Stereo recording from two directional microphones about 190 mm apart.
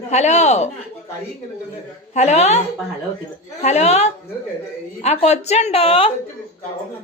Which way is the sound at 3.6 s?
35° left (ahead or behind).